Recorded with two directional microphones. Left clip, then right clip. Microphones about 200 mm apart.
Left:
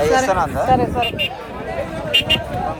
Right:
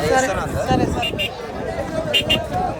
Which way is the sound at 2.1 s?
50° right (ahead or behind).